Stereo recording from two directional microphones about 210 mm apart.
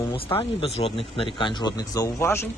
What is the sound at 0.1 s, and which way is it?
Speech, 25° left (ahead or behind).